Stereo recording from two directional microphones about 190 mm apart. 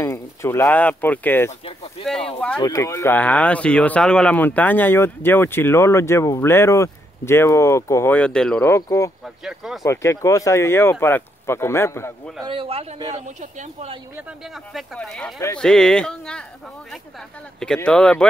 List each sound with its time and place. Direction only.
0.0 s speech: 15° left (ahead or behind)
1.6 s speech: 30° left (ahead or behind)
2.0 s speech: 5° left (ahead or behind)
9.2 s speech: 5° right (ahead or behind)
9.8 s speech: 15° left (ahead or behind)
12.4 s speech: 30° right (ahead or behind)
14.1 s speech: centre (ahead or behind)
17.7 s speech: 5° left (ahead or behind)